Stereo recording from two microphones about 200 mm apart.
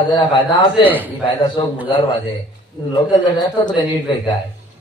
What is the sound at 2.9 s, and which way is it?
A man's voice, 20° left (ahead or behind).